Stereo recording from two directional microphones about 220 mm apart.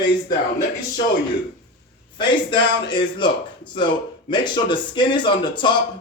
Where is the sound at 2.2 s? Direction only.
20° left (ahead or behind).